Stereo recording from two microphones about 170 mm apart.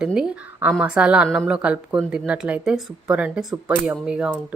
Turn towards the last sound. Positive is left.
turn(degrees=-5)  # may be behind; listen again after turning